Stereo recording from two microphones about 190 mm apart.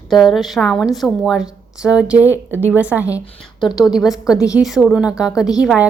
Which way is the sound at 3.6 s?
25° left (ahead or behind).